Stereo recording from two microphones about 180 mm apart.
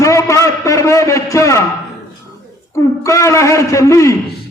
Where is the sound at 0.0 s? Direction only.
15° left (ahead or behind).